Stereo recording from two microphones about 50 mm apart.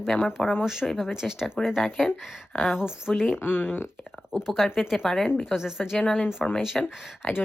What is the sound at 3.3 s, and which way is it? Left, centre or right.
Speech, left.